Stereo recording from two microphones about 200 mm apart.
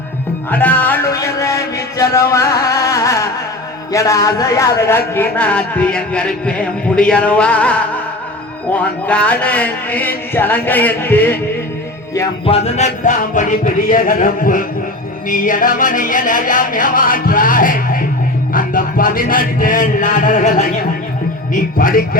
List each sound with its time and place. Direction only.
0.5 s a sound: 10° left (ahead or behind)
3.9 s a woman's voice: 15° left (ahead or behind)
12.5 s speech: 30° left (ahead or behind)
15.3 s music: 40° left (ahead or behind)
18.5 s a man's voice: 45° left (ahead or behind)
21.5 s music: 45° left (ahead or behind)